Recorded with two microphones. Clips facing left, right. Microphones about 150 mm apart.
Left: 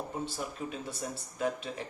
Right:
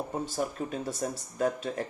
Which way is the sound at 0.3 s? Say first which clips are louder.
Right 6 dB; 45° right (ahead or behind).